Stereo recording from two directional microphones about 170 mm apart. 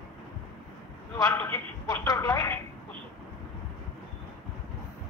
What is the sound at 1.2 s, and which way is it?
A woman's voice, 20° left (ahead or behind).